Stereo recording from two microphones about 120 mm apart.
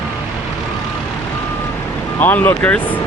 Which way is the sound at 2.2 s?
15° left (ahead or behind).